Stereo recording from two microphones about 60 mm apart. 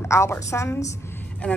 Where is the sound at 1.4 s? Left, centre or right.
Centre.